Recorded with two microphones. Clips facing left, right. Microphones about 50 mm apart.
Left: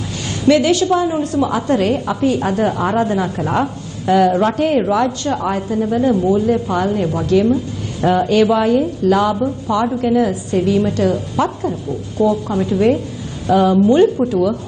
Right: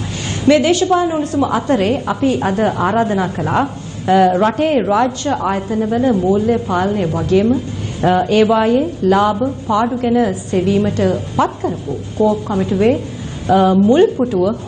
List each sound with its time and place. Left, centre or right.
0.3 s a woman's voice: right